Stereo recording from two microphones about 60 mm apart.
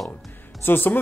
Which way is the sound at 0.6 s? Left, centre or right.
Left.